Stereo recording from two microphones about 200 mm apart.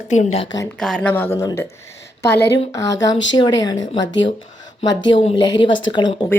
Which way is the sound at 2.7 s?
15° left (ahead or behind).